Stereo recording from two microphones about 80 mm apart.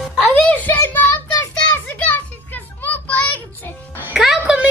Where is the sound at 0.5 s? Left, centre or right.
Left.